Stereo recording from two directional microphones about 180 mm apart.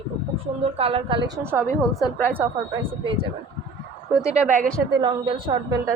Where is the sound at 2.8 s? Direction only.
30° right (ahead or behind).